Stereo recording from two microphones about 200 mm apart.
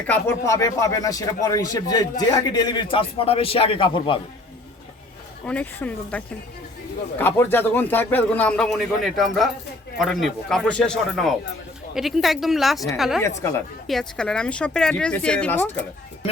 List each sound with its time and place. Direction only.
0.1 s speech: 15° left (ahead or behind)
5.5 s a man's voice: 5° left (ahead or behind)